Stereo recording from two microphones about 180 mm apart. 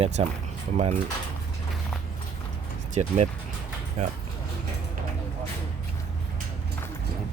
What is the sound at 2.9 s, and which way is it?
Speech, 40° right (ahead or behind).